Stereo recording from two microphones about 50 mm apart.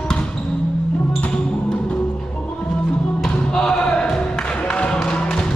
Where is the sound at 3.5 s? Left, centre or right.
Centre.